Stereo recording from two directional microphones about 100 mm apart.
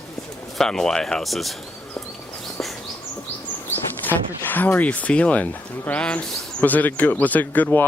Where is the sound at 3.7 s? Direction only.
20° left (ahead or behind).